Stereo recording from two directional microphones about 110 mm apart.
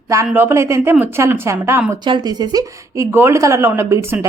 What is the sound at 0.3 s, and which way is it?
A woman's voice, 20° right (ahead or behind).